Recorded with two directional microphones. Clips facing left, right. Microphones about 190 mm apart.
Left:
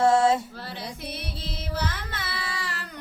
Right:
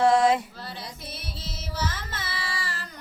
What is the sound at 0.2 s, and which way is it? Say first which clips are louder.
Female singing: even; 25° left (ahead or behind).